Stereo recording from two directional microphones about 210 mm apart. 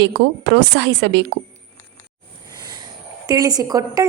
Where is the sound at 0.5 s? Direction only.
55° right (ahead or behind).